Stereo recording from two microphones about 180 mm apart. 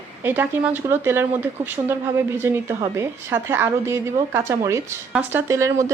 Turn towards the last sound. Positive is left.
turn(degrees=-15)  # may be behind; listen again after turning